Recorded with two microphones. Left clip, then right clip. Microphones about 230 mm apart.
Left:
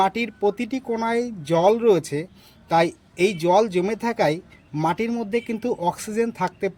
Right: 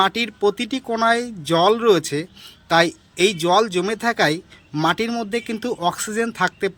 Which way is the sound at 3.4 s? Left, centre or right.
Right.